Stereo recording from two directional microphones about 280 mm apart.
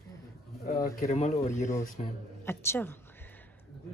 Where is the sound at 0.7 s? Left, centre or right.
Left.